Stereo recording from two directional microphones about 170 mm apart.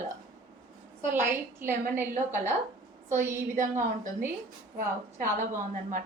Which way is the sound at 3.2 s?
50° right (ahead or behind).